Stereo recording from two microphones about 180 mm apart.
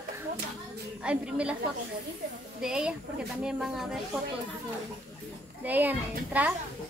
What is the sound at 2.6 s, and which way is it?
Speech, 5° right (ahead or behind).